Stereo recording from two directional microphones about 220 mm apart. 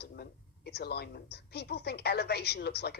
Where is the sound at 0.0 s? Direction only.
45° left (ahead or behind).